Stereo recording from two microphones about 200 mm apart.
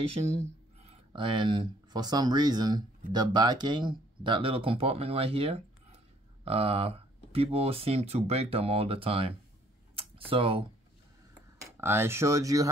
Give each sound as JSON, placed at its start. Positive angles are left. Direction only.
{"t": 0.1, "sound": "speech", "side_deg": -35}
{"t": 9.9, "sound": "a sound", "side_deg": -30}
{"t": 11.7, "sound": "speech", "side_deg": -10}